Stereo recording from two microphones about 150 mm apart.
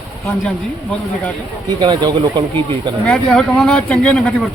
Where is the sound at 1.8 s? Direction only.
30° right (ahead or behind).